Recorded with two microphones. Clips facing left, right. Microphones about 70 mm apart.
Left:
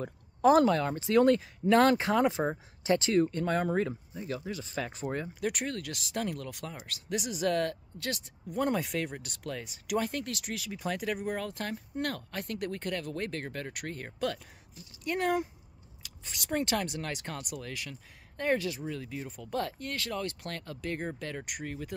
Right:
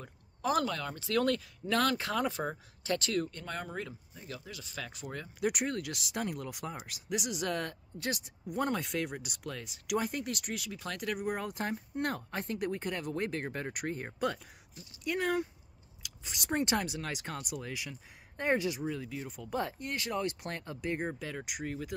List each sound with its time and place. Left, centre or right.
0.0 s speech: left
5.4 s speech: centre
8.6 s speech: centre
10.7 s speech: centre
11.2 s speech: centre
15.0 s speech: centre
16.3 s speech: right
16.8 s speech: centre